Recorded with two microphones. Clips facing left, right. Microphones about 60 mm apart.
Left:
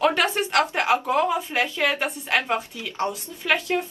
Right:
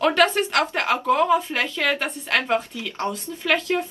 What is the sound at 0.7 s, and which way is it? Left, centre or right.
A woman's voice, centre.